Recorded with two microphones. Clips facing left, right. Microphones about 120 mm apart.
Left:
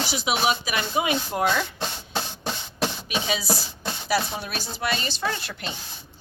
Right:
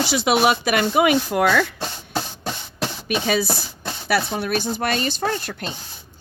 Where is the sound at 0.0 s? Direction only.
80° right.